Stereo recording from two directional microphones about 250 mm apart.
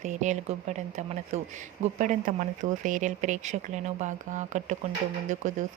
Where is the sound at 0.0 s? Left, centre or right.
Right.